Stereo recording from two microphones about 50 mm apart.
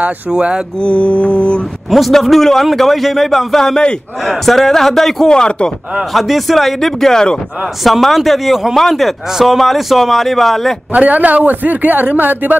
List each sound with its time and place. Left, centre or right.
0.3 s speech: right
0.7 s mantra: left
1.9 s speech: centre
5.3 s speech: centre
6.1 s speech: centre
7.8 s speech: centre
10.9 s a man's voice: right